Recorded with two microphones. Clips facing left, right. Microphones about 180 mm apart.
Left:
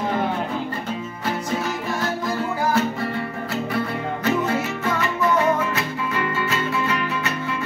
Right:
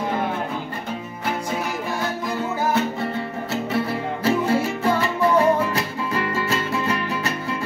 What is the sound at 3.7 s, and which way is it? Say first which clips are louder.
Music: right 1 dB; 30° right (ahead or behind).